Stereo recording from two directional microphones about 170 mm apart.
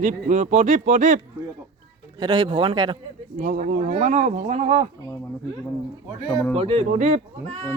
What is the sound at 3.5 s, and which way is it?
Speech, 50° right (ahead or behind).